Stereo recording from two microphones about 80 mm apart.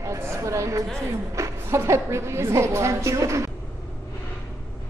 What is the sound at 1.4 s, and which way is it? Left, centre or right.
A woman's voice, right.